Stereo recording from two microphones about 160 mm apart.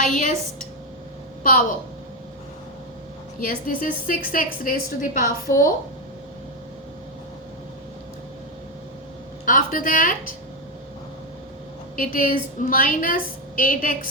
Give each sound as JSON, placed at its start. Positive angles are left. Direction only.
{"t": 0.0, "sound": "a woman's voice", "side_deg": 50}
{"t": 3.4, "sound": "a woman's voice", "side_deg": 60}
{"t": 9.5, "sound": "a woman's voice", "side_deg": 55}
{"t": 11.9, "sound": "a woman's voice", "side_deg": 60}